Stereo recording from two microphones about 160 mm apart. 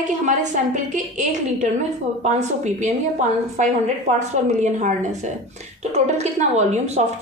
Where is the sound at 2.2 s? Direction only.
45° right (ahead or behind).